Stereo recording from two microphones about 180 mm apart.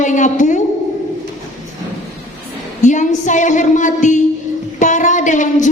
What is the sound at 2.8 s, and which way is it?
A woman's voice, 45° left (ahead or behind).